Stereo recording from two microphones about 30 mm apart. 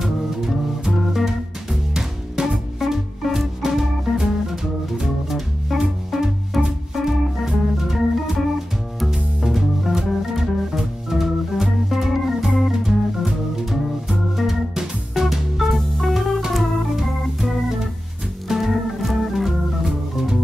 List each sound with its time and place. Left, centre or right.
0.0 s music: centre
7.4 s organ: centre
9.1 s music: centre
10.8 s organ: centre
14.8 s music: centre
16.9 s organ: centre
19.8 s organ: centre